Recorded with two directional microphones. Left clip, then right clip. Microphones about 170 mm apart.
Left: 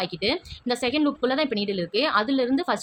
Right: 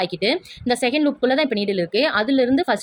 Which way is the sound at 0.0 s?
20° right (ahead or behind).